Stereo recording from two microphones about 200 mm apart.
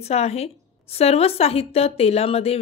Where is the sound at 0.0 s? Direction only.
30° left (ahead or behind).